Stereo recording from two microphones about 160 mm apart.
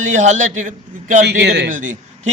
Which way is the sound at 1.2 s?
90° right.